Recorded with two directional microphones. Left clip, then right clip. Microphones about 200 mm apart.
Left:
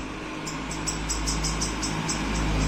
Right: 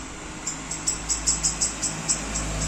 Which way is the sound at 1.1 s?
30° right (ahead or behind).